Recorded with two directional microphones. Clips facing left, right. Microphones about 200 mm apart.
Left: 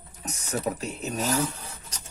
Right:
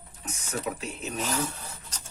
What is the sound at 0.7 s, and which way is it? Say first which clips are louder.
Speech: left 4 dB; 35° left (ahead or behind).